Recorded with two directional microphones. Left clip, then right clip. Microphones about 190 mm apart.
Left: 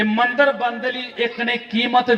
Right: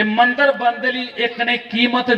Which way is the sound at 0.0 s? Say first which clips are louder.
Right 2 dB; 20° left (ahead or behind).